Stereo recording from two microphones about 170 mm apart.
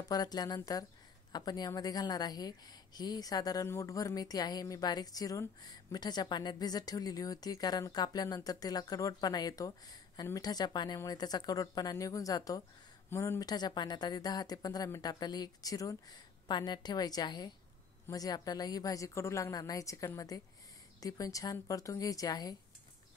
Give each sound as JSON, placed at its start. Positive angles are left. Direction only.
{"t": 0.1, "sound": "a woman's voice", "side_deg": 25}